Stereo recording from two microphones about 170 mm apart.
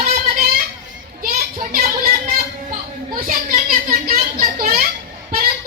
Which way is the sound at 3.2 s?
50° right (ahead or behind).